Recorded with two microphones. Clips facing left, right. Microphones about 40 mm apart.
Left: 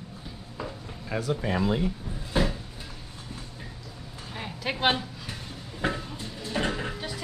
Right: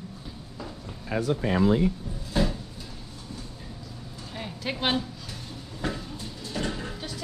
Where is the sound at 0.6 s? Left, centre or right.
Centre.